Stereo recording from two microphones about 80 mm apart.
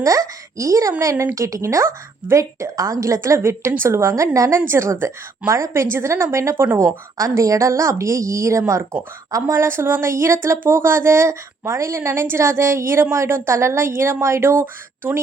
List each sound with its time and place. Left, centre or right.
0.0 s a woman's voice: right
8.8 s speech: right